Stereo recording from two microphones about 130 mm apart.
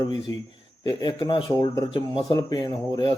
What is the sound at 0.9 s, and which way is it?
Speech, 35° left (ahead or behind).